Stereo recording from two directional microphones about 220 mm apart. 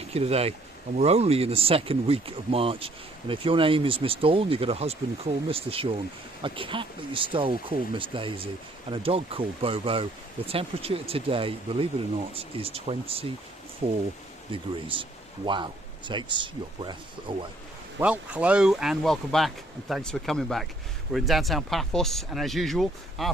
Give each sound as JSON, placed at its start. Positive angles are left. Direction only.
{"t": 0.1, "sound": "speech", "side_deg": -25}
{"t": 14.5, "sound": "speech", "side_deg": -25}
{"t": 18.0, "sound": "speech", "side_deg": -5}